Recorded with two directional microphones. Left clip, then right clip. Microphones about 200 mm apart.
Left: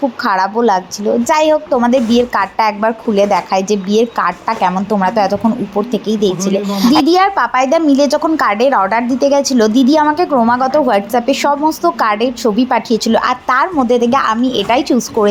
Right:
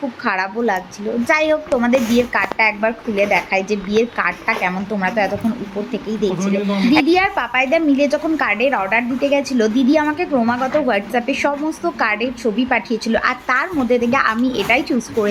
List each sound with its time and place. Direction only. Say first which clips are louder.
0.3 s a woman's voice: left 6 dB; 20° left (ahead or behind)